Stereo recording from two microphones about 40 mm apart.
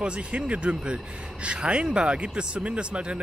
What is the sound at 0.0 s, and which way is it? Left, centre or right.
Speech, right.